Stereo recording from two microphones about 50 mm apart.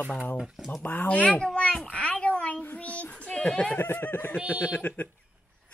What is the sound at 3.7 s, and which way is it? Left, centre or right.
A man's voice, left.